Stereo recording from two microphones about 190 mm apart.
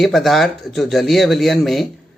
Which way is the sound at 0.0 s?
Centre (ahead or behind).